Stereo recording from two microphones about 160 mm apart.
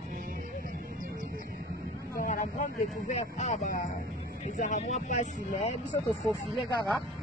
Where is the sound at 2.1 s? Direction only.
55° left (ahead or behind).